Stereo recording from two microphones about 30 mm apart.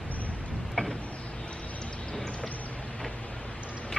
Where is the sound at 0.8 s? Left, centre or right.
Left.